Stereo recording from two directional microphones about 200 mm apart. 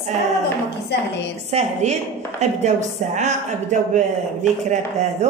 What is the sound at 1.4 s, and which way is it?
A woman's voice, 35° right (ahead or behind).